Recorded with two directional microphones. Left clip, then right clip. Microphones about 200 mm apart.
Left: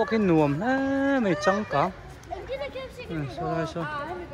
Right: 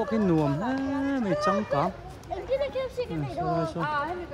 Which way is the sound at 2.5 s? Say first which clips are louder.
Right 7 dB; 50° right (ahead or behind).